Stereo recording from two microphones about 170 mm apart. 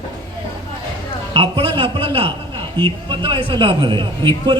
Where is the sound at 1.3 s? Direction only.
35° right (ahead or behind).